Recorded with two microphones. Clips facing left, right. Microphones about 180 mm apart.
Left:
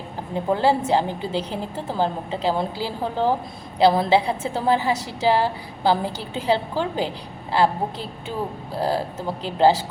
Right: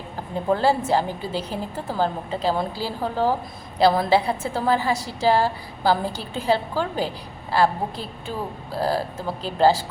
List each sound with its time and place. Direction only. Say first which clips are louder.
0.5 s a woman's voice: left 1 dB; 20° left (ahead or behind)